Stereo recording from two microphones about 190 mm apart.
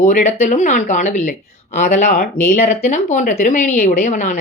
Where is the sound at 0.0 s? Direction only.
40° left (ahead or behind).